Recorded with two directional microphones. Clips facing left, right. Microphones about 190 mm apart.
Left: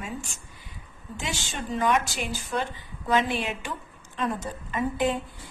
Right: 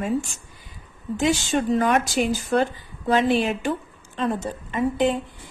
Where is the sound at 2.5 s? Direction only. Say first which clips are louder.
Right 8 dB; 65° right (ahead or behind).